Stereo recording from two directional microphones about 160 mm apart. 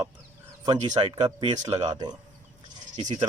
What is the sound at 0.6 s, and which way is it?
Speech, 25° right (ahead or behind).